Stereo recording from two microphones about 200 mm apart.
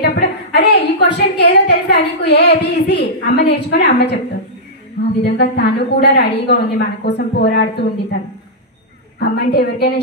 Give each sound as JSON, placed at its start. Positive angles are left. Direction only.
{"t": 0.0, "sound": "a sound", "side_deg": 55}
{"t": 2.9, "sound": "a woman's voice", "side_deg": 55}
{"t": 5.2, "sound": "a woman's voice", "side_deg": 55}
{"t": 9.2, "sound": "a woman's voice", "side_deg": 55}